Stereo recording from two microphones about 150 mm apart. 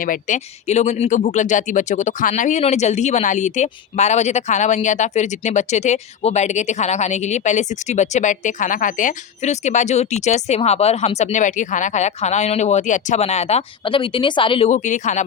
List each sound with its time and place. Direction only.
0.0 s speech: 60° left (ahead or behind); by 14.7 s 35° left (ahead or behind)
14.7 s speech: 55° left (ahead or behind)